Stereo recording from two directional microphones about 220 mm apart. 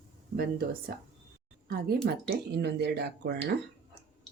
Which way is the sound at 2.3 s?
50° right (ahead or behind).